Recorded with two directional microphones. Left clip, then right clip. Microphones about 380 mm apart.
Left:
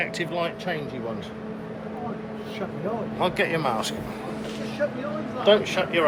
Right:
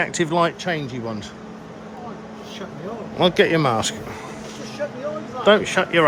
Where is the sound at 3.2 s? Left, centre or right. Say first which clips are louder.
Right 8 dB; right.